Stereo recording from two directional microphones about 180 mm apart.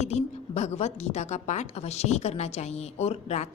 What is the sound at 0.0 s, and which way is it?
A woman's voice, 35° left (ahead or behind).